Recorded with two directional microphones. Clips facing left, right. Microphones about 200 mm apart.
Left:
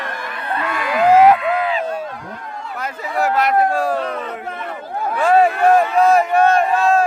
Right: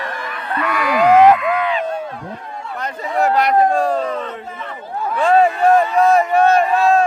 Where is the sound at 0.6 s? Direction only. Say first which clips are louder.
Right 2 dB; 25° left (ahead or behind).